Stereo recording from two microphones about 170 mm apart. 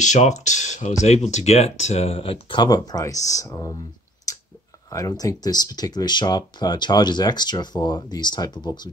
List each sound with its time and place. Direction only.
0.0 s speech: 45° left (ahead or behind); by 3.8 s 20° left (ahead or behind)
4.3 s clicking: 20° left (ahead or behind)
4.9 s speech: 20° left (ahead or behind)